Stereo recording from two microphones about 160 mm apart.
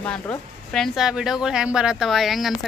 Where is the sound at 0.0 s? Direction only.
5° left (ahead or behind).